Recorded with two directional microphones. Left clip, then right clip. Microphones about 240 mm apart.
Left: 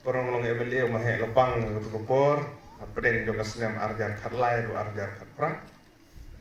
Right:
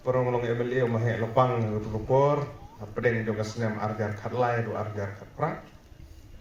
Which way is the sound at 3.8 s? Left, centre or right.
Right.